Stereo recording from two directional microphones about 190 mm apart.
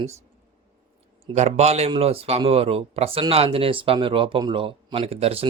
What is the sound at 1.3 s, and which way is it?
Speech, 35° right (ahead or behind).